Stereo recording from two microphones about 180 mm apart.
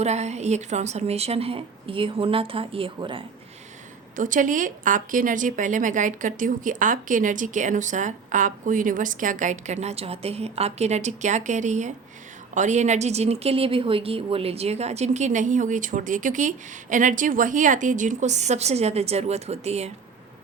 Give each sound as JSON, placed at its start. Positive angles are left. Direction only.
{"t": 0.0, "sound": "speech", "side_deg": -40}
{"t": 4.1, "sound": "a woman's voice", "side_deg": -45}